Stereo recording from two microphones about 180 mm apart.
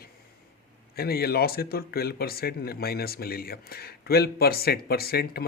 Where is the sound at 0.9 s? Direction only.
60° left (ahead or behind).